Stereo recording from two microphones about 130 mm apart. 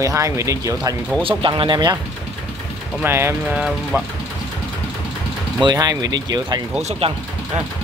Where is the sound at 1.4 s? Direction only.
40° right (ahead or behind).